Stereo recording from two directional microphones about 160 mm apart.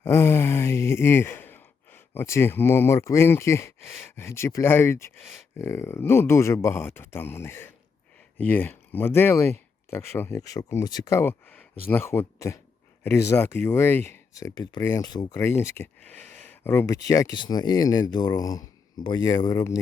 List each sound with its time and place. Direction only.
0.0 s a man's voice: 20° left (ahead or behind)